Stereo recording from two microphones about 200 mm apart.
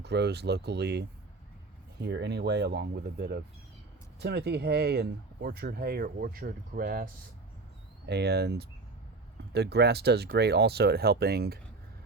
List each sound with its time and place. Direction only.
0.0 s speech: 55° right (ahead or behind)
8.0 s speech: 55° right (ahead or behind)